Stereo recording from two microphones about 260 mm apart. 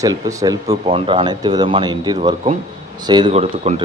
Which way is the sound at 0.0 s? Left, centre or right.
Centre.